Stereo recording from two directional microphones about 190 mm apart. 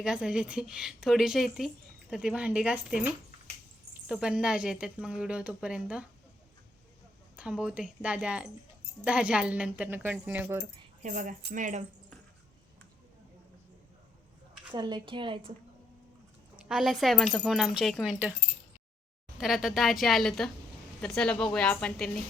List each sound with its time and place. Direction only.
0.0 s a woman's voice: 5° right (ahead or behind)
7.3 s a woman's voice: 5° right (ahead or behind)
11.0 s speech: 40° right (ahead or behind)
14.7 s speech: 25° right (ahead or behind)
16.6 s a woman's voice: centre (ahead or behind)
19.4 s a woman's voice: centre (ahead or behind)